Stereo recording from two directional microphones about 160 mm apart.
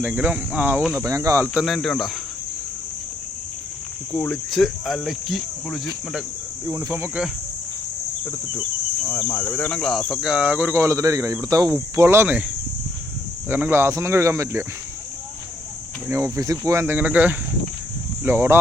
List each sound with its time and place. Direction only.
0.0 s speech: 10° right (ahead or behind)
0.9 s speech: 20° right (ahead or behind)
1.5 s cricket: centre (ahead or behind)
4.1 s cricket: 5° left (ahead or behind)
6.7 s speech: 20° right (ahead or behind)
9.1 s speech: 10° left (ahead or behind); by 12.4 s 15° right (ahead or behind)
13.5 s speech: 15° right (ahead or behind)
16.0 s speech: 15° right (ahead or behind)